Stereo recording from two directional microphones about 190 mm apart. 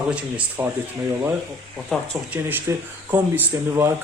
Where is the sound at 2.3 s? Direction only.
10° right (ahead or behind).